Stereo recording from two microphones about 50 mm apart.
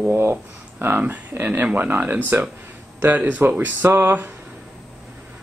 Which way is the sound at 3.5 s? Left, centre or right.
Right.